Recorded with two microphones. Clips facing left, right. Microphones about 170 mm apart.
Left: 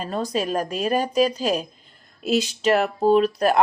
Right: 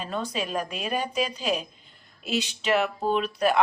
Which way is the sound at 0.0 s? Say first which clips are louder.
Left 5 dB; 40° left (ahead or behind).